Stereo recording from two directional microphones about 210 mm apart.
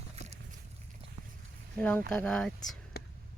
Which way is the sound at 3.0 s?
50° left (ahead or behind).